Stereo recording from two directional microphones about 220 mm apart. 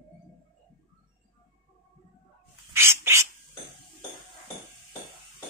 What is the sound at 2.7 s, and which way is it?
Bird, 10° right (ahead or behind).